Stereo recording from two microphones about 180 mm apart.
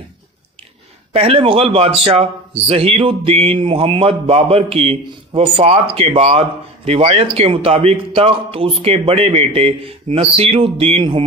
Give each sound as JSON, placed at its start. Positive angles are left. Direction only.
{"t": 1.1, "sound": "a man's voice", "side_deg": -30}